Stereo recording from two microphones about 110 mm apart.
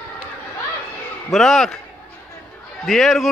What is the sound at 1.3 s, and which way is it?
Speech, centre (ahead or behind).